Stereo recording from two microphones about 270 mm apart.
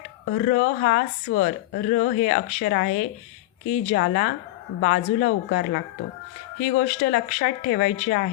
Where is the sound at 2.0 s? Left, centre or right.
Left.